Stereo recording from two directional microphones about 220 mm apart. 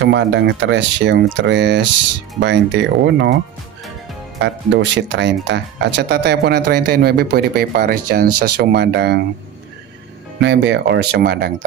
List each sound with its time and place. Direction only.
0.0 s speech: 55° right (ahead or behind)
4.4 s speech: 55° right (ahead or behind)
10.4 s speech: 55° right (ahead or behind)